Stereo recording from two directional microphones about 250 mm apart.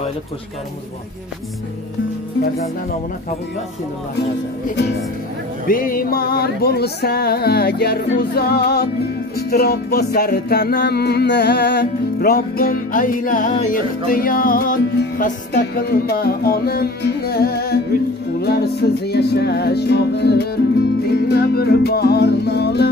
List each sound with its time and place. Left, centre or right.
5.7 s music: left